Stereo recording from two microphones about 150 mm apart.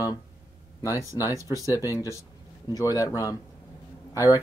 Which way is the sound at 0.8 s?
20° left (ahead or behind).